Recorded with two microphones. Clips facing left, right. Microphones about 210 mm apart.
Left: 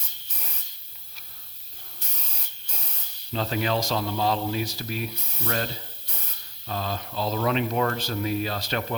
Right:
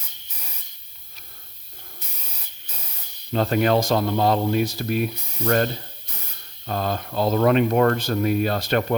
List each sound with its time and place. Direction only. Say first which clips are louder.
3.3 s speech: right 7 dB; 55° right (ahead or behind)